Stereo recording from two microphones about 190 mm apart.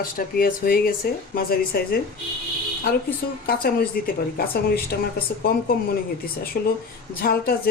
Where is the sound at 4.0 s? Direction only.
50° left (ahead or behind).